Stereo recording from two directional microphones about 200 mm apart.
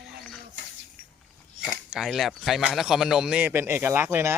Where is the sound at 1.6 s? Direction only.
5° right (ahead or behind).